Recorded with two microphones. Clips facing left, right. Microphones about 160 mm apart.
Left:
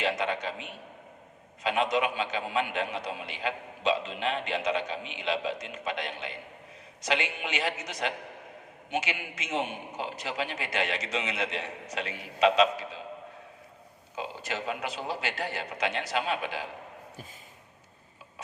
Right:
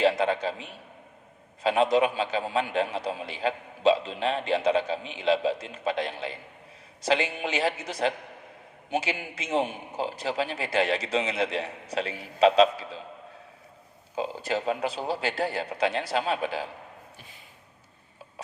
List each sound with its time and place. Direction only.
0.0 s a man's voice: 35° right (ahead or behind)
14.2 s a man's voice: 35° right (ahead or behind)